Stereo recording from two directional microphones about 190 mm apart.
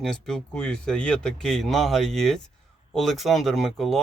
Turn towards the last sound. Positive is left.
turn(degrees=0)  # may be behind; listen again after turning